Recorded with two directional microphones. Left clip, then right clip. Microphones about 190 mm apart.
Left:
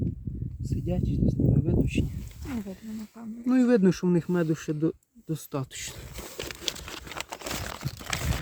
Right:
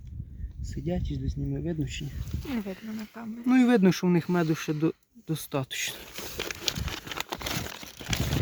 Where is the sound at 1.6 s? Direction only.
5° left (ahead or behind).